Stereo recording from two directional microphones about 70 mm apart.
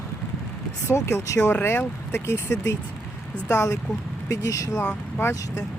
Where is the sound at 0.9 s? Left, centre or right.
Left.